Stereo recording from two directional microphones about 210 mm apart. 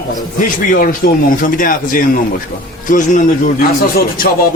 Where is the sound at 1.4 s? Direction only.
40° left (ahead or behind).